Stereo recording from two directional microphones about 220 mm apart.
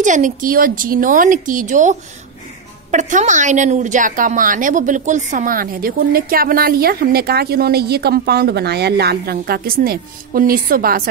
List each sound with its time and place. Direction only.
0.0 s a woman's voice: 35° right (ahead or behind)